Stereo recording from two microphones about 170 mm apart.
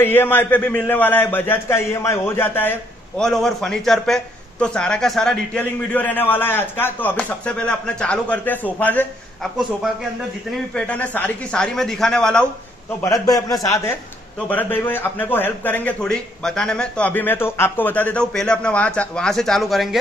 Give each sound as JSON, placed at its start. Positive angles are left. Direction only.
{"t": 0.0, "sound": "a man's voice", "side_deg": 10}
{"t": 10.7, "sound": "a man's voice", "side_deg": 5}
{"t": 13.0, "sound": "a man's voice", "side_deg": 20}